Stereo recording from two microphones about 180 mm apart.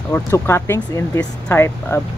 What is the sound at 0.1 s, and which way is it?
Speech, 15° left (ahead or behind).